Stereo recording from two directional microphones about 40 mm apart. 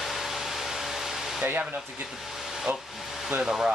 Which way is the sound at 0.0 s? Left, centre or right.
Centre.